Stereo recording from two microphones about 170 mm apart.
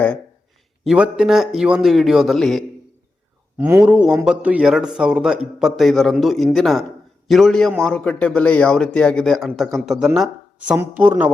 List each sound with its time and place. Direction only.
0.9 s a man's voice: 5° right (ahead or behind)